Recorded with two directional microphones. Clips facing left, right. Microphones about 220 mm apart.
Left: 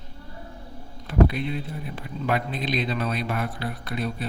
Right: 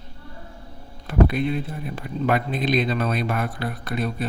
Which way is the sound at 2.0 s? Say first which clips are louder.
Right 4 dB; 50° right (ahead or behind).